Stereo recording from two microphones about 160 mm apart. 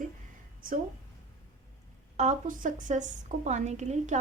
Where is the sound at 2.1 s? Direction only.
50° right (ahead or behind).